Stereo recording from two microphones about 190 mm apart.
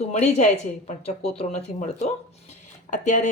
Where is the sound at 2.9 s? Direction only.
40° left (ahead or behind).